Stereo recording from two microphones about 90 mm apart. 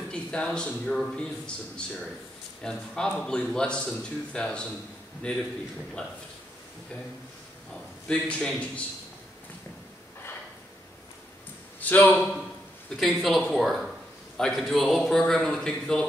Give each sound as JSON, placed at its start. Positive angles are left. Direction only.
{"t": 0.1, "sound": "a man's voice", "side_deg": 10}
{"t": 8.1, "sound": "a man's voice", "side_deg": 10}
{"t": 11.8, "sound": "a man's voice", "side_deg": 20}
{"t": 13.0, "sound": "a man's voice", "side_deg": 0}